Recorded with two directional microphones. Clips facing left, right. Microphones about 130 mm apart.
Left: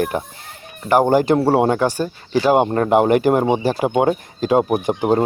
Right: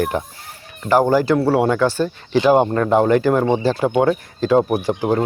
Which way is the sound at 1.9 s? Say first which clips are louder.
Right 2 dB; 15° left (ahead or behind).